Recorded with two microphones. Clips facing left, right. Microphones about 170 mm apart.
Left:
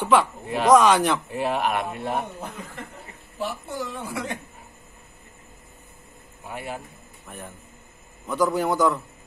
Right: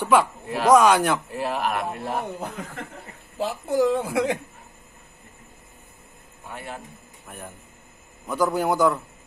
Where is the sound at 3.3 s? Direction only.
90° right.